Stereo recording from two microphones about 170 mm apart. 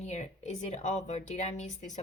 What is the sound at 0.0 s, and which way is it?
A woman's voice, 40° left (ahead or behind).